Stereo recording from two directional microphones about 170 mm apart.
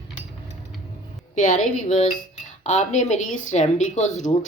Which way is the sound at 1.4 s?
50° left (ahead or behind).